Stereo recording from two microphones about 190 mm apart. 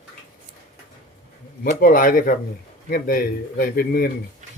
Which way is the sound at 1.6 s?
50° left (ahead or behind).